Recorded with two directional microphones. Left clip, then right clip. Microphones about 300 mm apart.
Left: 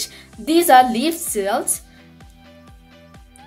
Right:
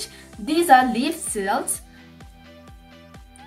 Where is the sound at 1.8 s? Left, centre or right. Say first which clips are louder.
Even; centre.